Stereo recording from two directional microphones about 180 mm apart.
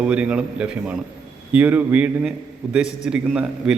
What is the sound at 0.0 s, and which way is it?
A man's voice, 5° right (ahead or behind).